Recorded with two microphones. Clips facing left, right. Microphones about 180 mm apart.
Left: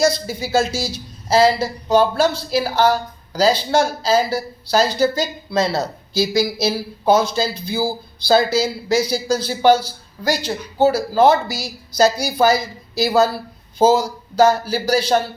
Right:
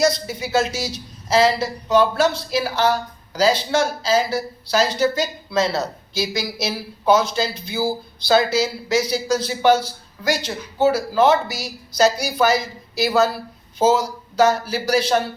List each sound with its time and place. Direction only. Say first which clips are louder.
0.0 s speech: left 1 dB; 30° left (ahead or behind)
8.5 s speech: left 2 dB; 30° left (ahead or behind)